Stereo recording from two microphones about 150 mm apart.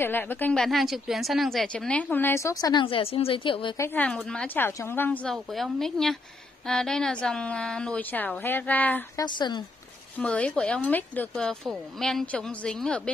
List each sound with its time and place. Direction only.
0.0 s a woman's voice: 15° left (ahead or behind); by 3.7 s 35° left (ahead or behind)
3.7 s a woman's voice: 15° left (ahead or behind)
4.6 s a woman's voice: 15° left (ahead or behind)
9.1 s a woman's voice: 30° left (ahead or behind)
10.1 s a woman's voice: 5° left (ahead or behind)